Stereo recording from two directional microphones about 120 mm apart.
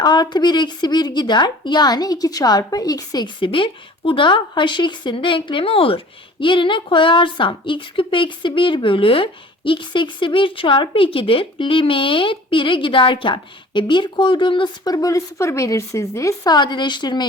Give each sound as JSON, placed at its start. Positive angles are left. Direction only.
{"t": 0.0, "sound": "a woman's voice", "side_deg": 35}